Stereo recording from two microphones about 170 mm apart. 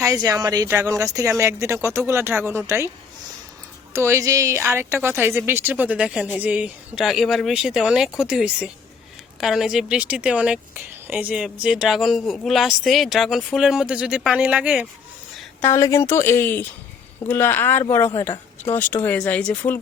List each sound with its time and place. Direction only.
0.0 s a woman's voice: 20° right (ahead or behind)
3.9 s a woman's voice: 15° right (ahead or behind)
15.6 s speech: 20° left (ahead or behind)